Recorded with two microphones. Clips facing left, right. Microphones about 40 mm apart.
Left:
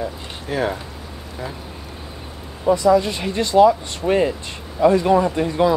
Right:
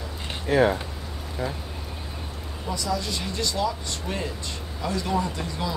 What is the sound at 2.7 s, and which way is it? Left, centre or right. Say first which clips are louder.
Speech: left 13 dB; left.